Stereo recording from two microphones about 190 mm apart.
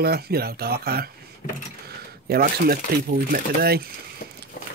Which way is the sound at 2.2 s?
55° right (ahead or behind).